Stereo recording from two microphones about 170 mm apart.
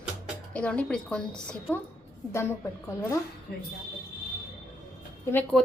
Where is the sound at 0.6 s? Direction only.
5° left (ahead or behind).